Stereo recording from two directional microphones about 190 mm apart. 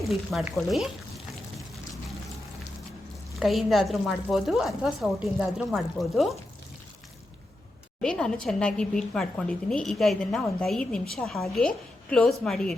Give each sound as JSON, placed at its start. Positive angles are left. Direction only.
{"t": 0.0, "sound": "frying", "side_deg": 0}
{"t": 3.4, "sound": "a woman's voice", "side_deg": 0}
{"t": 8.0, "sound": "a woman's voice", "side_deg": 5}